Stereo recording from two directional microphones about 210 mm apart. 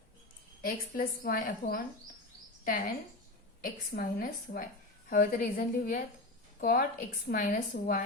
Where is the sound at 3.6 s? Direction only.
40° left (ahead or behind).